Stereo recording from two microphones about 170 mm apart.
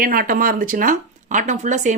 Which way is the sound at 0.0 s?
55° right (ahead or behind).